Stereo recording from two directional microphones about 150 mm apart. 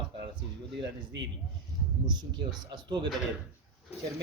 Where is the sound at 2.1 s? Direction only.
30° right (ahead or behind).